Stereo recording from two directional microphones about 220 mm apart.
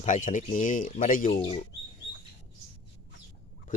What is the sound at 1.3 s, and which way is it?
Speech, 25° left (ahead or behind).